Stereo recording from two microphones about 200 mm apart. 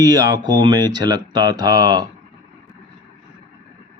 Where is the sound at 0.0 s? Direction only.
20° right (ahead or behind).